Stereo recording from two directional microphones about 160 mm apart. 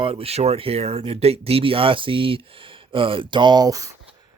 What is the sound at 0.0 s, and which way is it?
Speech, 35° right (ahead or behind).